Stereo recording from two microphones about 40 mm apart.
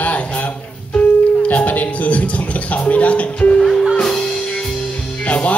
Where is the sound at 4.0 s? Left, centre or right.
Centre.